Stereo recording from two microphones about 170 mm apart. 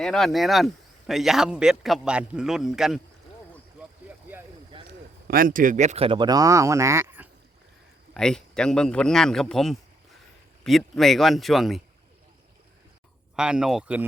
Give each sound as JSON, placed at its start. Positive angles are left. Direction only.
{"t": 0.0, "sound": "speech", "side_deg": 0}
{"t": 5.3, "sound": "speech", "side_deg": -55}
{"t": 8.1, "sound": "speech", "side_deg": 5}
{"t": 13.3, "sound": "speech", "side_deg": -5}